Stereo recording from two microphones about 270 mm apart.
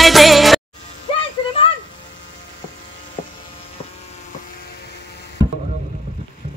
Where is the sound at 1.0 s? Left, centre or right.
Centre.